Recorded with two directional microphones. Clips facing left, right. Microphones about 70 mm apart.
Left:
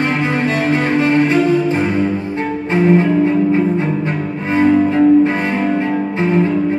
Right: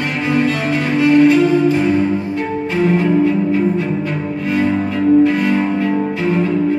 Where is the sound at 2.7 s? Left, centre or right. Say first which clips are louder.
Left 2 dB; left.